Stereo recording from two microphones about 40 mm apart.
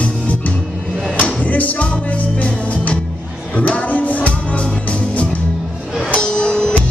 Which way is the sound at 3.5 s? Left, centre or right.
Left.